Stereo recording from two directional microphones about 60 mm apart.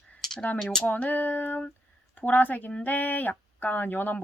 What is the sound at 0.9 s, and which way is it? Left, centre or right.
Speech, left.